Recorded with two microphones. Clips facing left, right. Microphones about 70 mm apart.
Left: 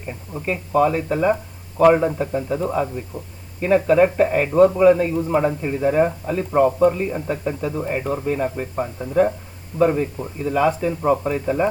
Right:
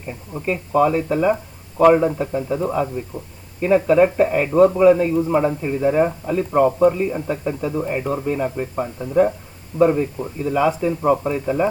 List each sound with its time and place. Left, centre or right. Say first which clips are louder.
0.1 s a man's voice: right 2 dB; centre